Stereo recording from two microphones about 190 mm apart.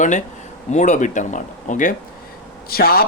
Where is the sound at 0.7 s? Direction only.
40° left (ahead or behind).